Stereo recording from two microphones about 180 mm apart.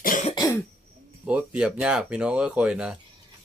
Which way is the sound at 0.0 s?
45° left (ahead or behind).